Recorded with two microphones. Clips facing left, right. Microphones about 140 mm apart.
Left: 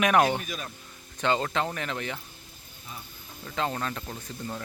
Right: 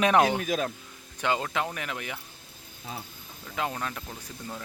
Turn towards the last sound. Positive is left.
turn(degrees=5)  # may be behind; listen again after turning